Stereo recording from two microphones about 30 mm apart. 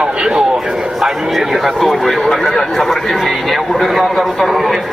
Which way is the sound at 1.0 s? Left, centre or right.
Centre.